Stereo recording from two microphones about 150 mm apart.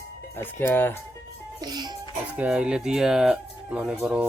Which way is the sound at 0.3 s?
15° left (ahead or behind).